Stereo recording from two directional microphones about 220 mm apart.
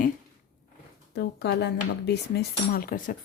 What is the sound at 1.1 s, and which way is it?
Speech, 50° left (ahead or behind).